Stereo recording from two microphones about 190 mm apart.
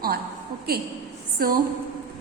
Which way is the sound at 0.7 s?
55° right (ahead or behind).